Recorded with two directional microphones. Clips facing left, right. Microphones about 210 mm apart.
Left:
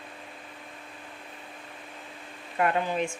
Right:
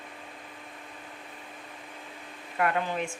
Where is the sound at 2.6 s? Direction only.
20° left (ahead or behind).